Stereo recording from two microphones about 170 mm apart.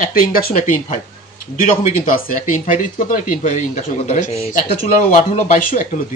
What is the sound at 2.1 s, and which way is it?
Speech, 50° left (ahead or behind).